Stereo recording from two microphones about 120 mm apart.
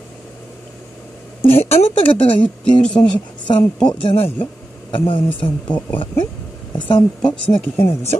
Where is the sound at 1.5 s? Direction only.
60° left (ahead or behind).